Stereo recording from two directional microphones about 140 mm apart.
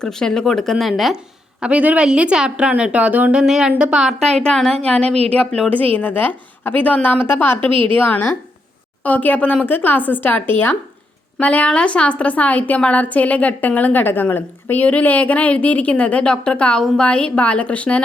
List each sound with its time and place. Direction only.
0.0 s a woman's voice: 5° left (ahead or behind)
5.0 s a woman's voice: 45° right (ahead or behind)
5.5 s a woman's voice: 10° left (ahead or behind)
7.7 s a woman's voice: 40° right (ahead or behind)
7.9 s a woman's voice: 10° left (ahead or behind)